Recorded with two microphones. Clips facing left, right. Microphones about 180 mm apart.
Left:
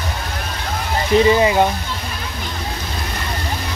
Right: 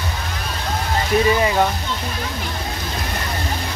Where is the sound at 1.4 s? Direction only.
20° left (ahead or behind).